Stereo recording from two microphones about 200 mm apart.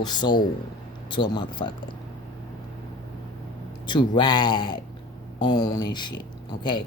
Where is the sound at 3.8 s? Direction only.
25° left (ahead or behind).